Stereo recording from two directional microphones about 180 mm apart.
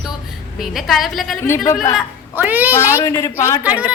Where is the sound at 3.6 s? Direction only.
10° right (ahead or behind).